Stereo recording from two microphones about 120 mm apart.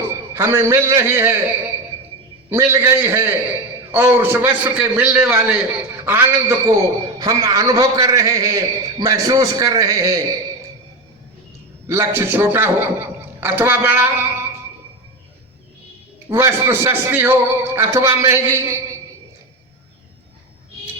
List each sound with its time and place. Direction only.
0.1 s a man's voice: 20° right (ahead or behind)
2.5 s a man's voice: 20° right (ahead or behind)
11.9 s a man's voice: 20° right (ahead or behind)
16.3 s a man's voice: 20° right (ahead or behind)